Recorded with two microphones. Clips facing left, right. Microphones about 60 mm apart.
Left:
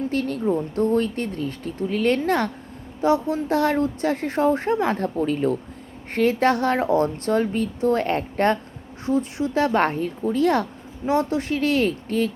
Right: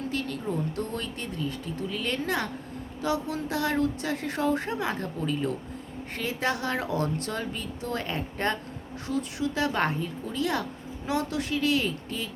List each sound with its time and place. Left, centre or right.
0.1 s speech: left
3.0 s speech: left
9.0 s speech: left
11.0 s speech: left